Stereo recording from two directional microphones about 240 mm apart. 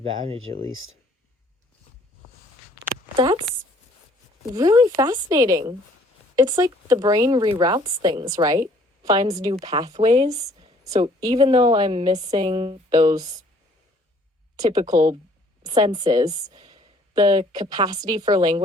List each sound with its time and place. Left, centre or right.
3.2 s speech: right
4.5 s speech: centre
14.5 s speech: centre